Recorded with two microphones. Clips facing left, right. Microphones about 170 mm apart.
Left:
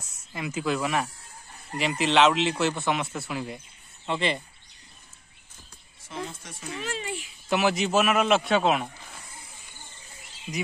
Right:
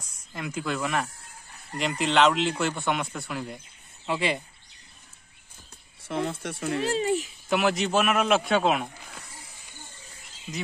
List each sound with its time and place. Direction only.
0.3 s speech: 5° left (ahead or behind)
6.0 s speech: 60° right (ahead or behind)
6.8 s a child's voice: 40° right (ahead or behind)
7.4 s speech: centre (ahead or behind)